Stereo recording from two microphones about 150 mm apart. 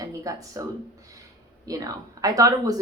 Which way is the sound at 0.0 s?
25° right (ahead or behind).